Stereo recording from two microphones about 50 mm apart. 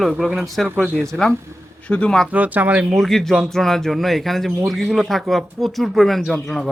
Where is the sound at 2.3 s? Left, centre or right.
Right.